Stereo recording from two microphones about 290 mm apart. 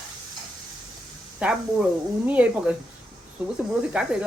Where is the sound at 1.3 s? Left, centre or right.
Centre.